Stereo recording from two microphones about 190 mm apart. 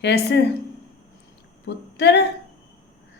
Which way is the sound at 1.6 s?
65° left (ahead or behind).